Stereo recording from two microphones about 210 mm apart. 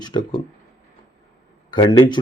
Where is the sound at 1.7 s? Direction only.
20° left (ahead or behind).